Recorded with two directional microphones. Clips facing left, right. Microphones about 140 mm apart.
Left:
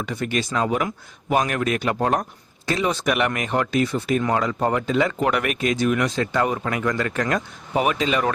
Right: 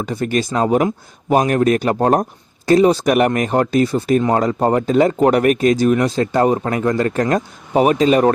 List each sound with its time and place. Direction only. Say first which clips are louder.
0.0 s speech: right 6 dB; 40° right (ahead or behind)